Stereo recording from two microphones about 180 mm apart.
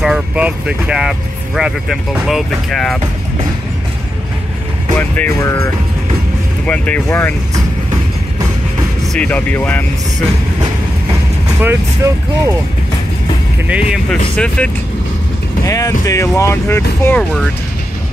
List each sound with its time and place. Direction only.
0.0 s speech: 5° right (ahead or behind)
4.9 s speech: 10° left (ahead or behind)
9.2 s speech: 10° left (ahead or behind)
11.6 s speech: 15° right (ahead or behind)
13.9 s speech: 5° left (ahead or behind)
15.6 s speech: 20° left (ahead or behind)